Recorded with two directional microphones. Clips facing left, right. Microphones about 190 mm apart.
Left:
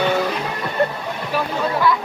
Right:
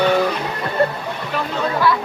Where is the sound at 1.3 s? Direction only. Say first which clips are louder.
Left 1 dB; 5° left (ahead or behind).